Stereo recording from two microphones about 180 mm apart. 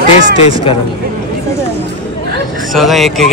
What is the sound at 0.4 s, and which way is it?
Speech, 30° left (ahead or behind).